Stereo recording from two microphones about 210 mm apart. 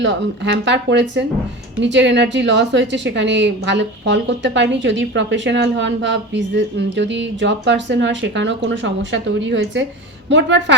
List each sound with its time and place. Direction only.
0.0 s a woman's voice: 60° right (ahead or behind)